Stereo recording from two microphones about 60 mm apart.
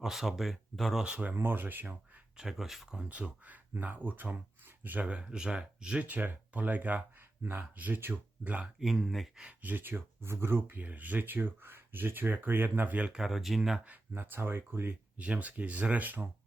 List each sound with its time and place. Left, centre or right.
0.0 s speech: centre
1.0 s speech: right
1.4 s speech: right
2.4 s speech: centre
3.0 s speech: right
6.1 s speech: right
8.8 s speech: centre
9.6 s speech: right
13.1 s speech: centre
13.8 s speech: right
15.2 s speech: right